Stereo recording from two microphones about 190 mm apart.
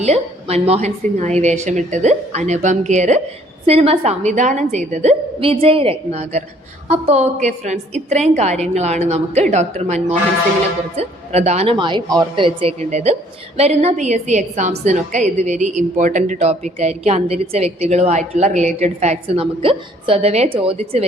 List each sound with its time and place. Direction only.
0.0 s a woman's voice: 35° right (ahead or behind)